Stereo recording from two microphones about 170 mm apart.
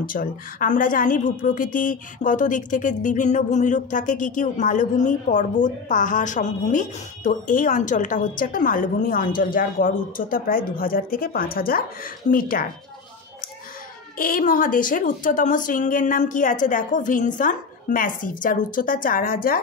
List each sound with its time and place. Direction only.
0.0 s a woman's voice: 55° left (ahead or behind)
14.1 s a woman's voice: 55° left (ahead or behind)